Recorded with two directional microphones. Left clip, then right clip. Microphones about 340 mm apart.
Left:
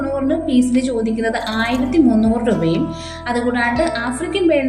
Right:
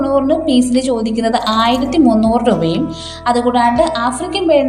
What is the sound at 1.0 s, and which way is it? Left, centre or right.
A woman's voice, centre.